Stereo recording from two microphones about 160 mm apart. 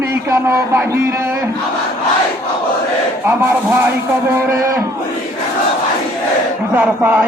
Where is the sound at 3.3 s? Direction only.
15° right (ahead or behind).